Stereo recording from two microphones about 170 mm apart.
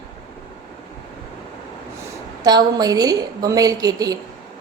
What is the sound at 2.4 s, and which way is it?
A woman's voice, 25° right (ahead or behind).